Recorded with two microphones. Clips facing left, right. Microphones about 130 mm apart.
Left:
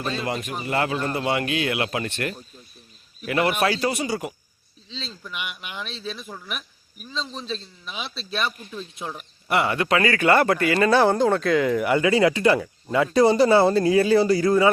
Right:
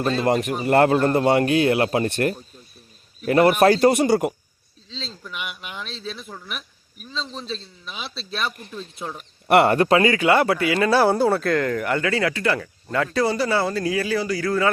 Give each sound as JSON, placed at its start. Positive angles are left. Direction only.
{"t": 0.0, "sound": "a man's voice", "side_deg": -45}
{"t": 4.9, "sound": "speech", "side_deg": 0}
{"t": 9.5, "sound": "speech", "side_deg": -60}
{"t": 9.7, "sound": "a man's voice", "side_deg": -35}
{"t": 10.2, "sound": "speech", "side_deg": -10}
{"t": 11.7, "sound": "speech", "side_deg": 10}